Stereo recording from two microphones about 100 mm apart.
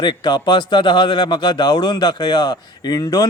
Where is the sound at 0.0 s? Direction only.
45° left (ahead or behind).